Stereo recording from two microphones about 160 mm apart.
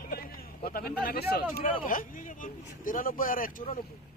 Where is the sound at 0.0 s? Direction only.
65° left (ahead or behind).